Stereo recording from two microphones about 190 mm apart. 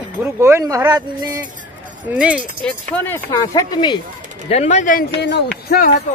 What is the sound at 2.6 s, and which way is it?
Speech, 5° left (ahead or behind).